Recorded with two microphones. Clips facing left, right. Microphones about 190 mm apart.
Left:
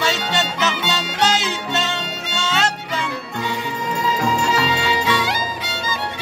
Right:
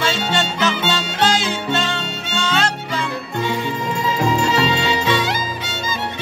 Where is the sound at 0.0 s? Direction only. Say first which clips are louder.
Right 1 dB; 20° left (ahead or behind).